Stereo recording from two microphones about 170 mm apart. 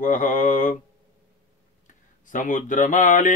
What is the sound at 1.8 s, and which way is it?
Speech, 50° left (ahead or behind).